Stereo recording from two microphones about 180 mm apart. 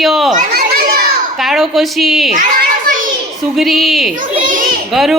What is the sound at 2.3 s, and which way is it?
Children playing, 50° right (ahead or behind).